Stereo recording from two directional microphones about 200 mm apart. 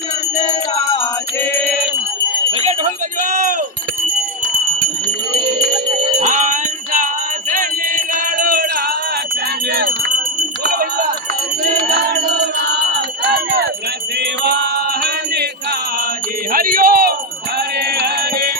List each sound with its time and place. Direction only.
0.3 s music: 30° left (ahead or behind)
3.2 s a sound: 45° right (ahead or behind)
6.1 s music: 40° right (ahead or behind)
10.6 s a sound: 50° right (ahead or behind)
14.2 s music: 55° right (ahead or behind)
16.5 s music: 45° right (ahead or behind)